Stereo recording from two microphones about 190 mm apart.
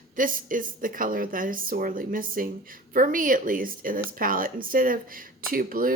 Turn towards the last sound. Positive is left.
turn(degrees=-50)  # may be behind; listen again after turning